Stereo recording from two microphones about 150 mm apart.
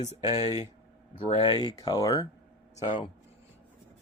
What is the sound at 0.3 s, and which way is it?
Speech, 45° left (ahead or behind).